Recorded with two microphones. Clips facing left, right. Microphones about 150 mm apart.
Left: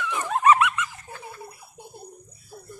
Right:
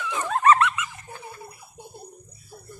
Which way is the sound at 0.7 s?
10° right (ahead or behind).